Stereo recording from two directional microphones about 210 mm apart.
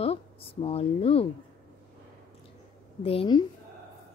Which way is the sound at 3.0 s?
25° left (ahead or behind).